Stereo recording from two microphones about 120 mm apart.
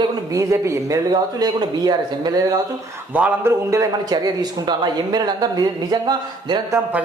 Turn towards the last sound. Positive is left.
turn(degrees=-35)  # may be behind; listen again after turning